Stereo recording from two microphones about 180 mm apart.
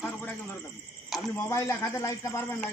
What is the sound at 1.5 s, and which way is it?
Speech, 15° left (ahead or behind).